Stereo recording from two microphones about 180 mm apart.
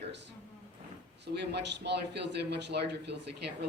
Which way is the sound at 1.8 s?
70° right (ahead or behind).